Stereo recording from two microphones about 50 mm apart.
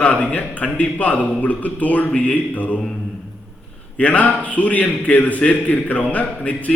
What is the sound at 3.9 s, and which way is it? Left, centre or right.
A man's voice, left.